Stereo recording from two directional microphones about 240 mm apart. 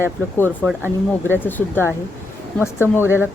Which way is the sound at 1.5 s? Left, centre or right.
Centre.